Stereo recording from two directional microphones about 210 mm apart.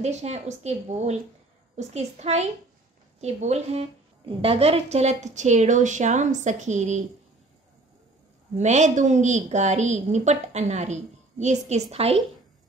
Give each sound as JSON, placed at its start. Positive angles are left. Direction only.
{"t": 0.0, "sound": "a woman's voice", "side_deg": -30}
{"t": 8.5, "sound": "a woman's voice", "side_deg": -35}